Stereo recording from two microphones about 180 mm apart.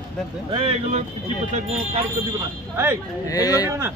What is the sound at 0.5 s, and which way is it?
Speech, 30° right (ahead or behind).